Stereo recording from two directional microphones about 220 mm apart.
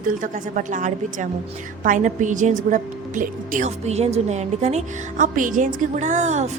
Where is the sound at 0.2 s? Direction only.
35° right (ahead or behind).